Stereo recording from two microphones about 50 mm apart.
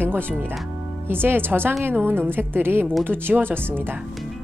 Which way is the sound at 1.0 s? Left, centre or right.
Right.